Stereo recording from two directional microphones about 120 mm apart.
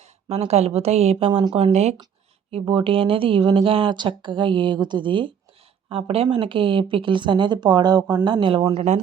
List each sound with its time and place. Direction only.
0.3 s a woman's voice: 60° right (ahead or behind)
1.5 s a woman's voice: 60° right (ahead or behind)
2.5 s speech: 50° right (ahead or behind)